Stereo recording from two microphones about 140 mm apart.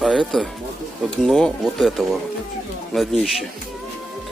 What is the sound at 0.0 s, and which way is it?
Speech, centre (ahead or behind).